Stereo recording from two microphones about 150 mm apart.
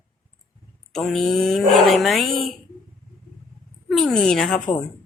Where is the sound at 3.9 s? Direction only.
Centre (ahead or behind).